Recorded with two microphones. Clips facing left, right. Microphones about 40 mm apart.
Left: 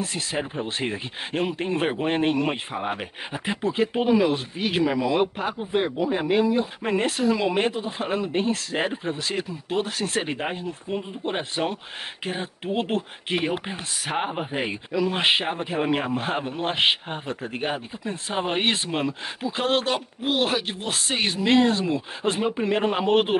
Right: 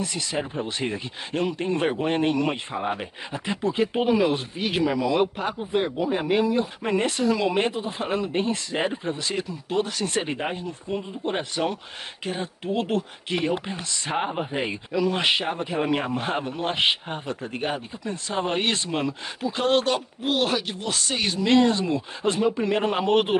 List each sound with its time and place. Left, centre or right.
0.0 s speech: centre
3.9 s speech: centre
4.6 s speech: centre
5.9 s speech: centre
6.4 s speech: centre
9.1 s speech: centre
10.3 s speech: centre; by 14.1 s left
14.1 s speech: centre